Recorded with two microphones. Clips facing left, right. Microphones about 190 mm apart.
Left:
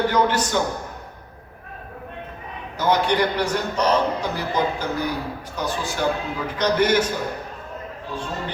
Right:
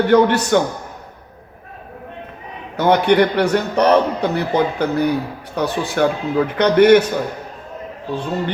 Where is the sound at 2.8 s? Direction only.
65° right (ahead or behind).